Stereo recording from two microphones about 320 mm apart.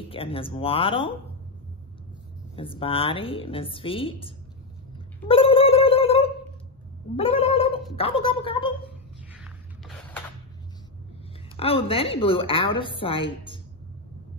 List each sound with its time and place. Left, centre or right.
0.1 s a woman's voice: centre
2.5 s a woman's voice: centre
5.3 s a sound: centre
7.2 s cat: centre
7.9 s a woman's voice: centre
9.3 s a sound: centre
11.5 s a woman's voice: centre